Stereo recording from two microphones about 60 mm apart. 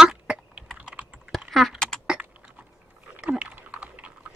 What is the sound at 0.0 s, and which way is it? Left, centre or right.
Typing, centre.